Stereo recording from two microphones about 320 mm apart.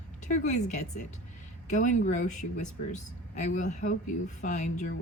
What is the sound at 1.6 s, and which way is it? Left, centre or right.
Speech, left.